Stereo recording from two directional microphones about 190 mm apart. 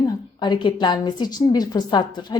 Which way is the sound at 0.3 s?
25° left (ahead or behind).